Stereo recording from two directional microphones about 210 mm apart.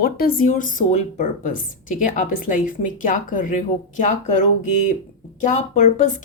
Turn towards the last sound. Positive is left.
turn(degrees=35)  # may be behind; listen again after turning